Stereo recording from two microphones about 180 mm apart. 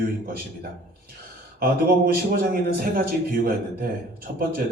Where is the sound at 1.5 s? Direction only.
55° right (ahead or behind).